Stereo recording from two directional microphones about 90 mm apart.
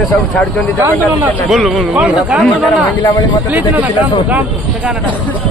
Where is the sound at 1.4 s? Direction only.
Centre (ahead or behind).